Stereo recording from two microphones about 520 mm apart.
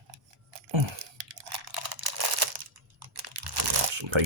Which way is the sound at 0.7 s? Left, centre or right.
Right.